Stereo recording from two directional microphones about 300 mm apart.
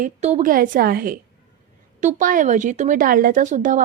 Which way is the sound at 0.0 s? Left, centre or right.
Right.